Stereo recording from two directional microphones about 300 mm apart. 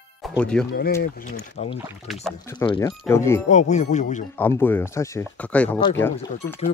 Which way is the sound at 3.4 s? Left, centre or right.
Left.